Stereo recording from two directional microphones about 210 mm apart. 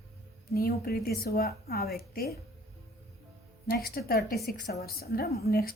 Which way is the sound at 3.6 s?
45° left (ahead or behind).